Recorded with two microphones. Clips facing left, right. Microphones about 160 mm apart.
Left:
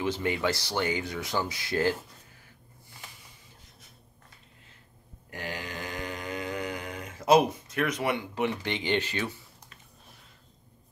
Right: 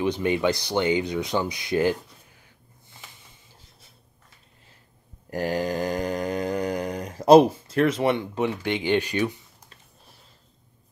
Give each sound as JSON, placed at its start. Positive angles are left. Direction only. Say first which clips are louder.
{"t": 0.0, "sound": "speech", "louder": "right 5 dB", "side_deg": -20}
{"t": 5.3, "sound": "mantra", "louder": "right 12 dB", "side_deg": -40}